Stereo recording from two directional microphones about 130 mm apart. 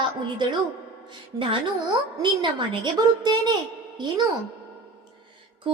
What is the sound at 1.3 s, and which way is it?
Speech, 30° right (ahead or behind).